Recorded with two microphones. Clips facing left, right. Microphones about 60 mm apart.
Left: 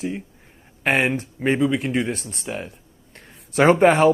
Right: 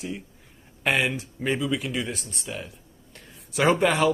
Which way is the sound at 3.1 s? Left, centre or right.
Left.